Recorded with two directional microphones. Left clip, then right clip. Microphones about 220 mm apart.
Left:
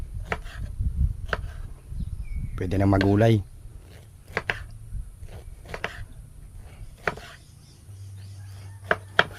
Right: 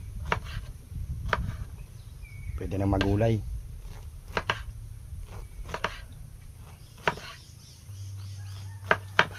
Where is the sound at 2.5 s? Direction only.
50° left (ahead or behind).